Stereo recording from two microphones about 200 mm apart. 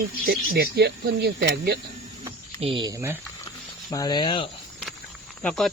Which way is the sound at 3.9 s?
20° left (ahead or behind).